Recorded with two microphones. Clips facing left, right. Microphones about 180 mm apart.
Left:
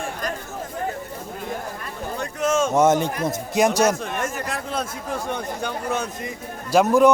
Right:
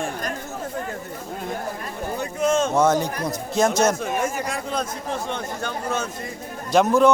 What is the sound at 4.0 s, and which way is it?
Speech, centre (ahead or behind).